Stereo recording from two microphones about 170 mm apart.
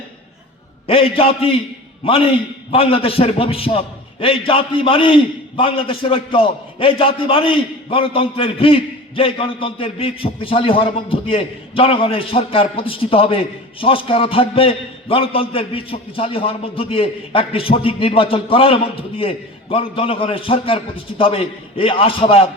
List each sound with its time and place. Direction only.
0.9 s a man's voice: 35° left (ahead or behind)